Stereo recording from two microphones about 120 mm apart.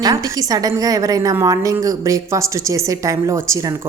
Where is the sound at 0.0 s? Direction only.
30° right (ahead or behind).